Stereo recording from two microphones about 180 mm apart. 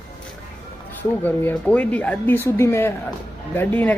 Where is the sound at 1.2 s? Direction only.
10° left (ahead or behind).